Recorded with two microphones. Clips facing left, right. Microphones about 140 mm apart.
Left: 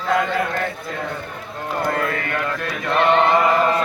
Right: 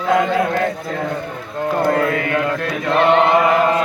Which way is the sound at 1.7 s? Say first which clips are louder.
Right 5 dB; 25° right (ahead or behind).